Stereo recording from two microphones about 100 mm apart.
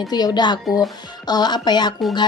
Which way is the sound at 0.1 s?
45° left (ahead or behind).